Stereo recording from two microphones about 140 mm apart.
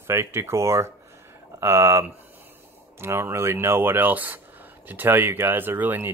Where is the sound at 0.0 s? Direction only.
20° right (ahead or behind).